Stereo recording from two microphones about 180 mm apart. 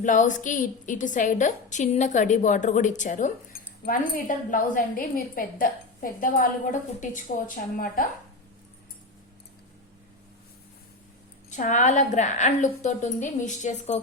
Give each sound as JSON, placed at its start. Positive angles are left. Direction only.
{"t": 0.0, "sound": "a woman's voice", "side_deg": 45}
{"t": 11.5, "sound": "a woman's voice", "side_deg": 40}